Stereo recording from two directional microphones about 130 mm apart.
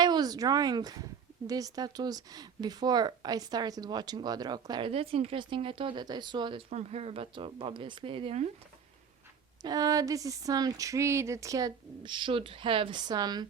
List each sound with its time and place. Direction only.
0.0 s speech: 30° right (ahead or behind)
4.9 s speech: 45° right (ahead or behind)
6.7 s speech: 55° right (ahead or behind)
9.6 s speech: 30° right (ahead or behind)